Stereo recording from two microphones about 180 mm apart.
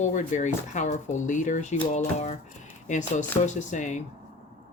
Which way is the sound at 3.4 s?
40° left (ahead or behind).